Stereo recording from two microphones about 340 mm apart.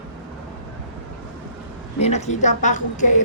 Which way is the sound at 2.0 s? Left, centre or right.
Centre.